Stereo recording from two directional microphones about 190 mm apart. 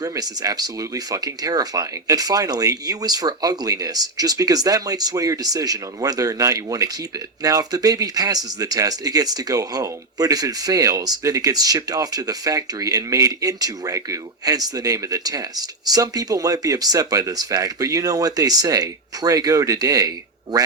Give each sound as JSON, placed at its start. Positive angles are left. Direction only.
{"t": 0.0, "sound": "speech", "side_deg": -20}